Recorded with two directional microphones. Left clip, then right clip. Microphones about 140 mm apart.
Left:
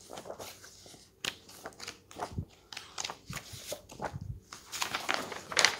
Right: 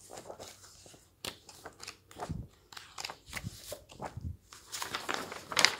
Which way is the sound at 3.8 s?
5° left (ahead or behind).